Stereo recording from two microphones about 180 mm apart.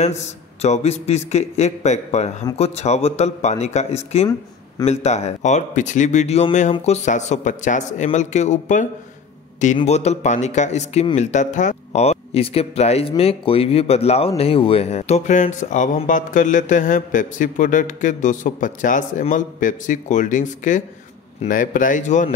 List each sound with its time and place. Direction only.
0.6 s speech: 35° left (ahead or behind)